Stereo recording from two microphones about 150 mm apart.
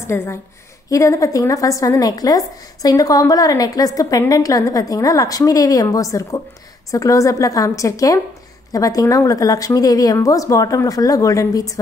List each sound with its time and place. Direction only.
0.0 s a woman's voice: 15° left (ahead or behind)